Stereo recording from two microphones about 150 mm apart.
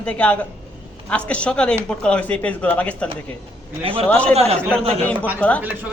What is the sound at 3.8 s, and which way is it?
Speech, 40° right (ahead or behind).